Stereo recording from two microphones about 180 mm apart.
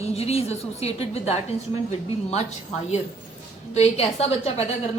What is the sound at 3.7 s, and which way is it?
Speech, 35° left (ahead or behind).